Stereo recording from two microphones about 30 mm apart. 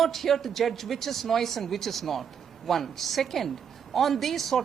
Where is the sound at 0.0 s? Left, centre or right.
Centre.